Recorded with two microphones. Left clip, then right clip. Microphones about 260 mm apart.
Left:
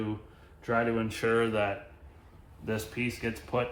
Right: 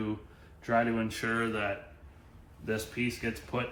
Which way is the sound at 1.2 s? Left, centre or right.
Left.